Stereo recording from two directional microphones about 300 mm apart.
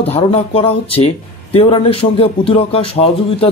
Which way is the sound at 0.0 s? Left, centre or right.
Left.